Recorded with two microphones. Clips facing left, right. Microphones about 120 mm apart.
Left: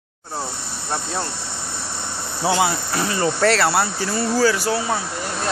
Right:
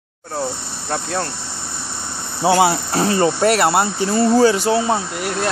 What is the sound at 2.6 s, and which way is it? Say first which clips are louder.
Speech: right 5 dB; 30° right (ahead or behind).